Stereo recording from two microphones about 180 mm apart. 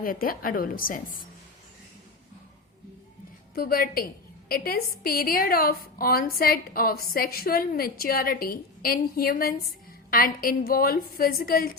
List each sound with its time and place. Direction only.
0.0 s a woman's voice: 55° left (ahead or behind)
3.5 s a woman's voice: 55° left (ahead or behind)